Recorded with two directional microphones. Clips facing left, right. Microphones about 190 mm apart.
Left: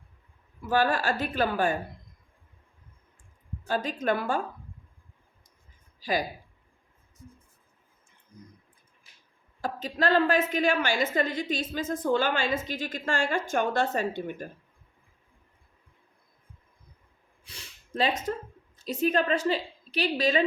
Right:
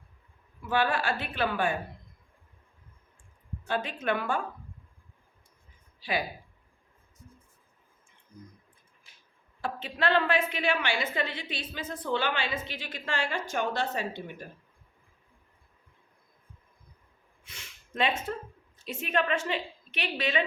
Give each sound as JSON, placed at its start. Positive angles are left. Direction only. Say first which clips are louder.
{"t": 0.7, "sound": "a woman's voice", "louder": "left 3 dB", "side_deg": 40}
{"t": 3.7, "sound": "a woman's voice", "louder": "left 3 dB", "side_deg": 40}
{"t": 6.0, "sound": "speech", "louder": "left 3 dB", "side_deg": 40}
{"t": 9.6, "sound": "a woman's voice", "louder": "left 3 dB", "side_deg": 40}
{"t": 17.4, "sound": "a sound", "louder": "left 2 dB", "side_deg": 35}
{"t": 18.9, "sound": "a woman's voice", "louder": "left 4 dB", "side_deg": 35}